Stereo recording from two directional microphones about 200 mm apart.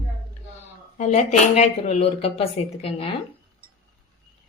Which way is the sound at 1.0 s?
35° left (ahead or behind).